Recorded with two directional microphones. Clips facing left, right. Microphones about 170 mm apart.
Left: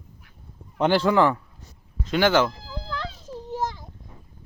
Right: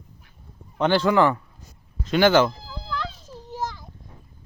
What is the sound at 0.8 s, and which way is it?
Speech, 10° left (ahead or behind).